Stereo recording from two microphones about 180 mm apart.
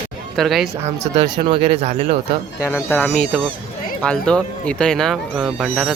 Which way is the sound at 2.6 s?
10° left (ahead or behind).